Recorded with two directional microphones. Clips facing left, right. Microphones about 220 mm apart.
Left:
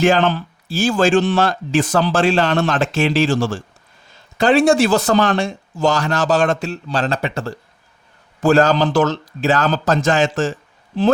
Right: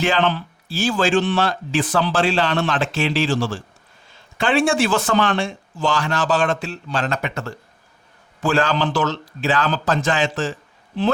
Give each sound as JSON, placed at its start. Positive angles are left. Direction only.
{"t": 0.0, "sound": "speech", "side_deg": 45}
{"t": 8.4, "sound": "speech", "side_deg": 40}